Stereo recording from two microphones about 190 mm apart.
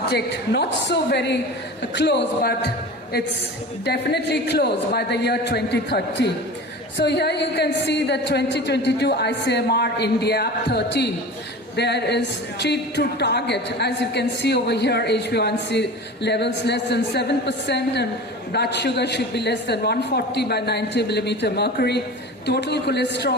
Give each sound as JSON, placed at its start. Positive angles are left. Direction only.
{"t": 0.1, "sound": "a woman's voice", "side_deg": 60}